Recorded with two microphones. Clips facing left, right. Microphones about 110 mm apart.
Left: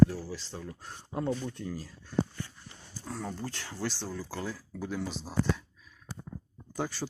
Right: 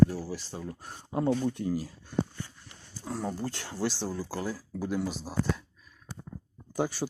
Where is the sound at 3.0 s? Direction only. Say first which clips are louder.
Right 4 dB; 15° right (ahead or behind).